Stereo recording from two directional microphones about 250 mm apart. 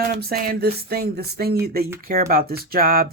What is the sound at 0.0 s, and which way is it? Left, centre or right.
Speech, right.